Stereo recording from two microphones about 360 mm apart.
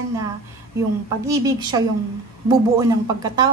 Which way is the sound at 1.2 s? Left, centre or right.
Centre.